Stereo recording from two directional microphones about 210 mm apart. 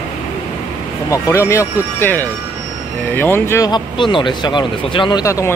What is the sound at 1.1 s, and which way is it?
Speech, 15° left (ahead or behind).